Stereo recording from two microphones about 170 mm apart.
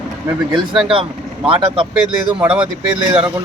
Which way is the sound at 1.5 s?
30° right (ahead or behind).